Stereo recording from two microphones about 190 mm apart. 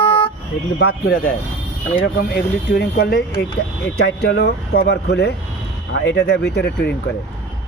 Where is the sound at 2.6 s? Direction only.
55° left (ahead or behind).